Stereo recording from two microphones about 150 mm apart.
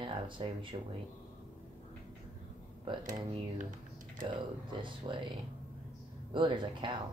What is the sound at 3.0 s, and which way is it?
Speech, 60° right (ahead or behind).